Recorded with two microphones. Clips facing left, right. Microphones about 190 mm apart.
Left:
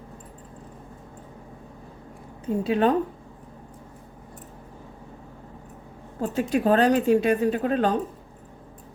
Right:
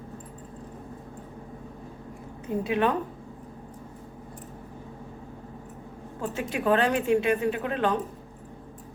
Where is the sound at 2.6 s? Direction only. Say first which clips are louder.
Left 3 dB; 30° left (ahead or behind).